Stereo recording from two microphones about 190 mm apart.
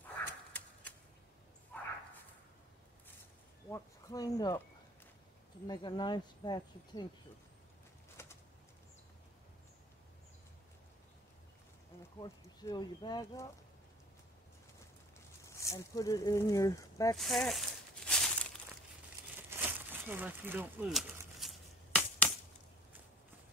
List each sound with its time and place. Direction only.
0.2 s a sound: 10° left (ahead or behind)
3.7 s speech: 20° left (ahead or behind)
5.7 s speech: 20° left (ahead or behind)
8.2 s bird: 15° left (ahead or behind)
12.2 s speech: 20° left (ahead or behind)
15.5 s speech: 15° left (ahead or behind)
17.2 s crumpling: centre (ahead or behind)
19.5 s speech: 10° right (ahead or behind)
21.4 s chop: 5° left (ahead or behind)